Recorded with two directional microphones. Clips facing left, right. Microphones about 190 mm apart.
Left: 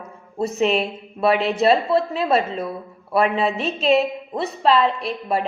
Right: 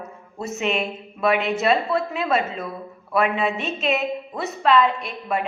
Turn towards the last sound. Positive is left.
turn(degrees=30)  # may be behind; listen again after turning